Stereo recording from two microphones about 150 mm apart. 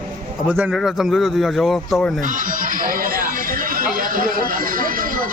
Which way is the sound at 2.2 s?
60° right (ahead or behind).